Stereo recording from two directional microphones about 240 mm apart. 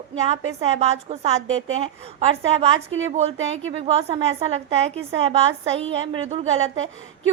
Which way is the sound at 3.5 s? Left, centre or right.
Right.